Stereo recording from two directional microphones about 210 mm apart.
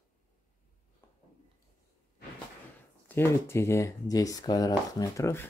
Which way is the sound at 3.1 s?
10° left (ahead or behind).